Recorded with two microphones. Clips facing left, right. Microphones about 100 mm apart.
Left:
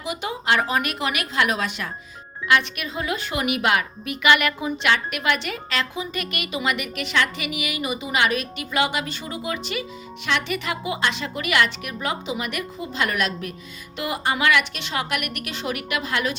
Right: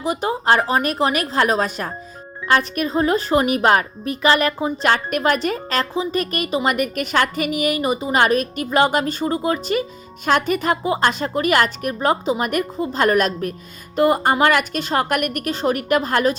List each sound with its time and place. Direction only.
0.0 s a woman's voice: 40° right (ahead or behind)